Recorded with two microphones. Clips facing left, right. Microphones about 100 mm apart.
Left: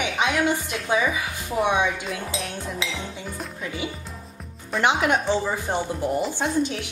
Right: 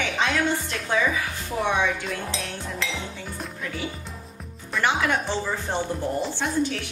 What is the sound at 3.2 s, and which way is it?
Music, centre (ahead or behind).